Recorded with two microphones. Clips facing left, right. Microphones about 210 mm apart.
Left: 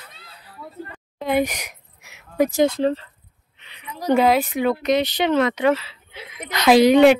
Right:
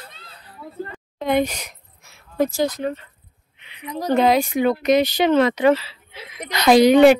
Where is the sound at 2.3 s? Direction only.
20° left (ahead or behind).